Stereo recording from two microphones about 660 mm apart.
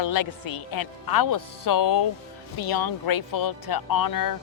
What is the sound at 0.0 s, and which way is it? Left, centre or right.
Speech, left.